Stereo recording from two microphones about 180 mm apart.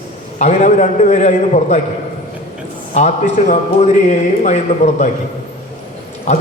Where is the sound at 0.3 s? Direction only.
40° left (ahead or behind).